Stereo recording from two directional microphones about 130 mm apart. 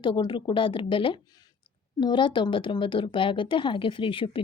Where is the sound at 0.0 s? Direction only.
40° left (ahead or behind).